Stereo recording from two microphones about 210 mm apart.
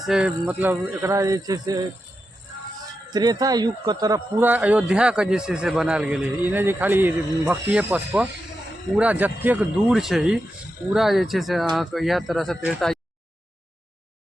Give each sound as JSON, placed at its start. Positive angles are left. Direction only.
{"t": 0.0, "sound": "a man's voice", "side_deg": -5}
{"t": 3.1, "sound": "a man's voice", "side_deg": -20}